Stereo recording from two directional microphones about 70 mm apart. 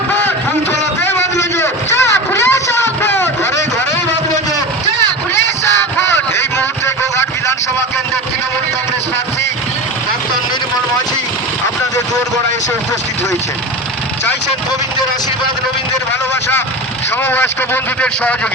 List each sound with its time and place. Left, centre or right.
1.0 s a sound: left
6.1 s vehicle: left
17.2 s speech: left